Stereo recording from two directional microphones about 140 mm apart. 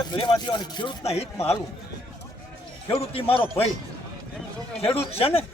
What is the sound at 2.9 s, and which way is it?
Speech, 45° left (ahead or behind).